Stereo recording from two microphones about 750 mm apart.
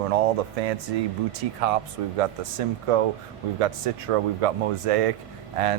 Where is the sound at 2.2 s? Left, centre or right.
Right.